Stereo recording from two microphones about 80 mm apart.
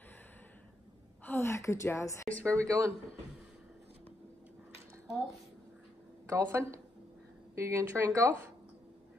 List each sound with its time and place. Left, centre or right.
1.2 s a woman's voice: left
2.4 s speech: right
6.2 s speech: right